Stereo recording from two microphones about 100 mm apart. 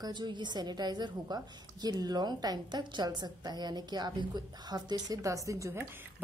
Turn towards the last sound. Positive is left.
turn(degrees=-30)  # may be behind; listen again after turning